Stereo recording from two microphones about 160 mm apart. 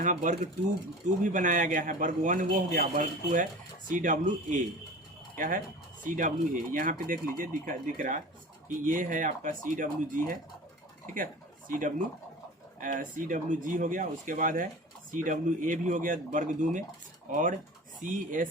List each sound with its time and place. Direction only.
0.0 s speech: 55° right (ahead or behind)
18.0 s speech: 55° right (ahead or behind)